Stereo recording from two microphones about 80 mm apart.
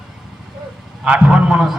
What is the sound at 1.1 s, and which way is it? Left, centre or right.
Speech, centre.